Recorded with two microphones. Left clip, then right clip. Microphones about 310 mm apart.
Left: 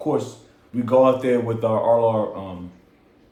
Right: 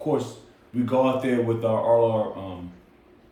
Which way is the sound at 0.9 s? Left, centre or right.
Left.